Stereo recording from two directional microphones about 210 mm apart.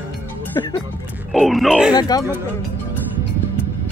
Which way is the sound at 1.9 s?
20° left (ahead or behind).